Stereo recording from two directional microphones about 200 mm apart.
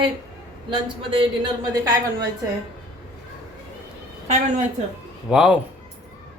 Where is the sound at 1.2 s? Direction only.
20° right (ahead or behind).